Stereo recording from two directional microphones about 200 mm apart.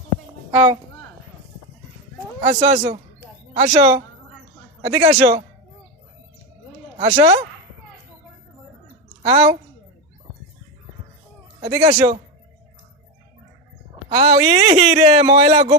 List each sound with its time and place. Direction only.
0.5 s speech: 25° right (ahead or behind)
2.4 s a man's voice: 30° right (ahead or behind)
7.0 s a man's voice: 30° right (ahead or behind)
9.2 s a man's voice: 30° right (ahead or behind)
11.8 s speech: 30° right (ahead or behind)
14.1 s a man's voice: 30° right (ahead or behind)